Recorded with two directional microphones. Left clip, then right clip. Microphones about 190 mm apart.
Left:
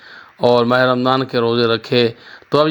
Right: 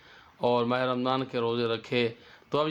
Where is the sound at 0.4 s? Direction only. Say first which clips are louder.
Left 13 dB; 30° left (ahead or behind).